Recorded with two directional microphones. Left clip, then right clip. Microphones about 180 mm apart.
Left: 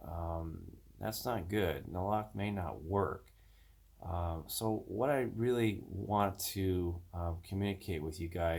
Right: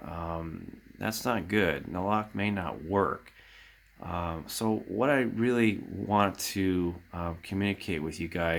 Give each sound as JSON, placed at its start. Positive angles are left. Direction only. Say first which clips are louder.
{"t": 0.0, "sound": "a sound", "louder": "right 6 dB", "side_deg": -30}
{"t": 0.9, "sound": "speech", "louder": "right 7 dB", "side_deg": -25}
{"t": 4.6, "sound": "speech", "louder": "right 7 dB", "side_deg": -45}
{"t": 5.0, "sound": "speech", "louder": "right 6 dB", "side_deg": -25}